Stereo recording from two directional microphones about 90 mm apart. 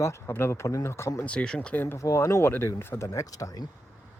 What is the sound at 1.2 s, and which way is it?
Speech, 15° left (ahead or behind).